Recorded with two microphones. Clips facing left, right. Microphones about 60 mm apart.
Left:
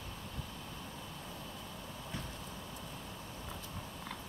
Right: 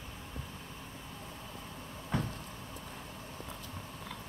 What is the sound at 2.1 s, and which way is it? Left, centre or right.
Vehicle, right.